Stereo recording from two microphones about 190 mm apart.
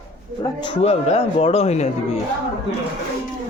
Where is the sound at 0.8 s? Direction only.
35° left (ahead or behind).